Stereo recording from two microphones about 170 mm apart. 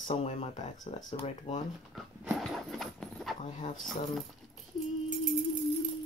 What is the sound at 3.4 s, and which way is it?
Speech, 45° left (ahead or behind).